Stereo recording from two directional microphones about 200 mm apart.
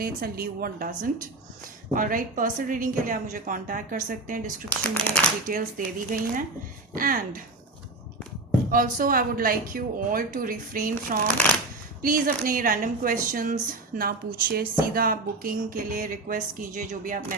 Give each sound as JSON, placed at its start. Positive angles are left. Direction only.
{"t": 0.0, "sound": "speech", "side_deg": -45}
{"t": 8.7, "sound": "speech", "side_deg": -45}